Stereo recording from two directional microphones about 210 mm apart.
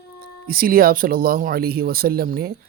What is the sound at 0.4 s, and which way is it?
Speech, 45° right (ahead or behind).